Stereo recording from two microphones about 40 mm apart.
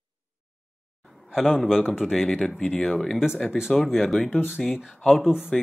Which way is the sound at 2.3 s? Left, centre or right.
Centre.